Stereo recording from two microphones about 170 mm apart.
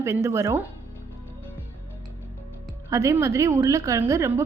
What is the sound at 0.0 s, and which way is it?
Speech, 15° right (ahead or behind).